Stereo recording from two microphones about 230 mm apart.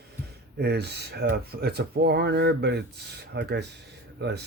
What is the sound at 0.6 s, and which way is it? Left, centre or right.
Speech, right.